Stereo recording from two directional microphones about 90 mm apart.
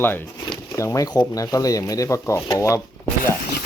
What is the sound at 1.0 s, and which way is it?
Speech, 50° left (ahead or behind).